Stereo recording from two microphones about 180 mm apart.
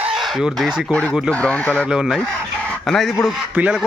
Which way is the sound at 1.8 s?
5° right (ahead or behind).